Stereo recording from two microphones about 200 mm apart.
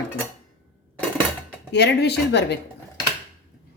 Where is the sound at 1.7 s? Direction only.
55° left (ahead or behind).